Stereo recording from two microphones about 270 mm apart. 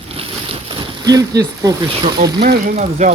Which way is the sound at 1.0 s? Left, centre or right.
Centre.